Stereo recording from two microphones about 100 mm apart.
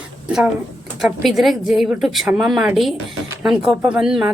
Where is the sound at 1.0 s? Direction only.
Centre (ahead or behind).